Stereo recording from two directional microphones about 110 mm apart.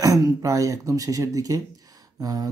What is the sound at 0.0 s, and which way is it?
Speech, 30° right (ahead or behind).